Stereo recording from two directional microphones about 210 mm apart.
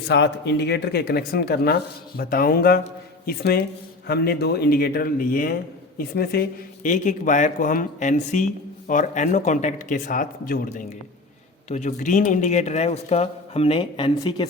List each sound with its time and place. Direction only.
0.1 s speech: 55° left (ahead or behind); by 14.4 s 25° left (ahead or behind)